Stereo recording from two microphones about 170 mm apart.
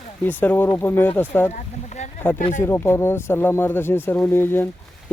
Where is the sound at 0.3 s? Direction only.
10° left (ahead or behind).